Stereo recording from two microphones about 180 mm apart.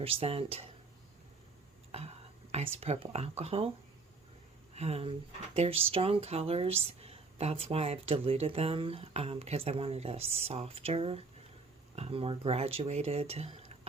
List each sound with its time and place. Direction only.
0.0 s speech: 30° right (ahead or behind)
2.7 s speech: 35° right (ahead or behind)
4.7 s speech: 35° right (ahead or behind)